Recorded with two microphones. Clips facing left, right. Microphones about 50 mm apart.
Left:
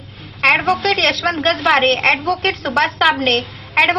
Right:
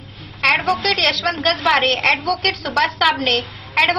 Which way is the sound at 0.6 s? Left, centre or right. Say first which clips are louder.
Left 2 dB; left.